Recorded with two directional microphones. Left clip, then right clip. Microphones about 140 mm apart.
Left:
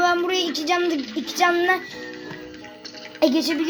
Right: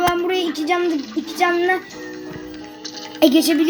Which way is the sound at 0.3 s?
90° left.